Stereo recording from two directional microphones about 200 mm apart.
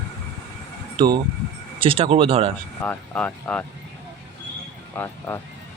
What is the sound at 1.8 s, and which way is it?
Speech, 25° right (ahead or behind).